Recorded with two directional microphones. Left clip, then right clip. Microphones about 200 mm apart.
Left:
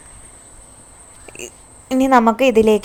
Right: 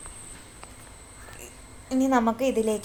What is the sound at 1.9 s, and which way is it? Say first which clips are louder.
Speech: left 10 dB; 40° left (ahead or behind).